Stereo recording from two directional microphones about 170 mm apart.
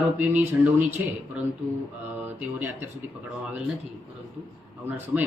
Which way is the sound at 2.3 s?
10° right (ahead or behind).